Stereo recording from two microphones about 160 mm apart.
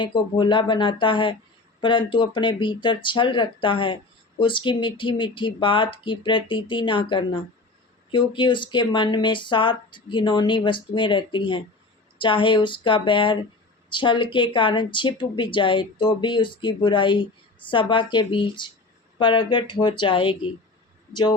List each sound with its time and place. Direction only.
0.0 s speech: 30° left (ahead or behind)